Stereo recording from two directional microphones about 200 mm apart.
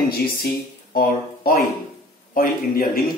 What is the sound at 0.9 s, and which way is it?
A man's voice, 45° left (ahead or behind).